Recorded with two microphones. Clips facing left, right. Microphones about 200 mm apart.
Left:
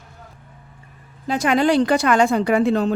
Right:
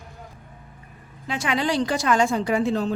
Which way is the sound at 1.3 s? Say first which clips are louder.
Left 7 dB; 45° left (ahead or behind).